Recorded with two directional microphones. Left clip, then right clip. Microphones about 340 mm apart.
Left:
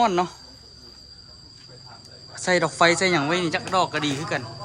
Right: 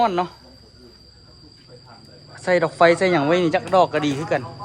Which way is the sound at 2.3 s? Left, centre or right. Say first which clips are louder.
Right 3 dB; centre.